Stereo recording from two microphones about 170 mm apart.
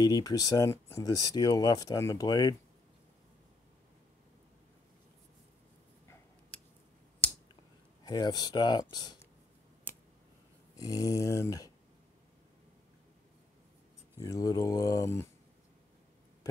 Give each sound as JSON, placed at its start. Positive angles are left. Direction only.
{"t": 0.0, "sound": "speech", "side_deg": 20}
{"t": 8.0, "sound": "speech", "side_deg": 25}
{"t": 10.8, "sound": "speech", "side_deg": 20}
{"t": 14.2, "sound": "speech", "side_deg": 20}